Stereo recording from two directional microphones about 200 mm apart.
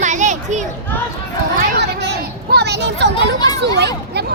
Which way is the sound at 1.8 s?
55° right (ahead or behind).